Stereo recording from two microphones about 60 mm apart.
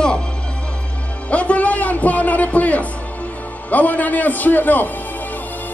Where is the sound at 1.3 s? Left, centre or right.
Left.